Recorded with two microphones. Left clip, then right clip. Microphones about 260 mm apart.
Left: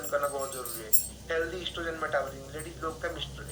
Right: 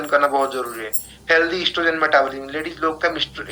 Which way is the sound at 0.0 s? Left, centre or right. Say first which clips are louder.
Right 14 dB; right.